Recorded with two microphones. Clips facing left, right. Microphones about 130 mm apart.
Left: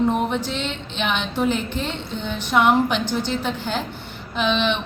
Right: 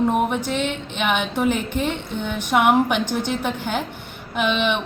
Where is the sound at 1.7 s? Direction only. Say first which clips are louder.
Right 3 dB; 15° right (ahead or behind).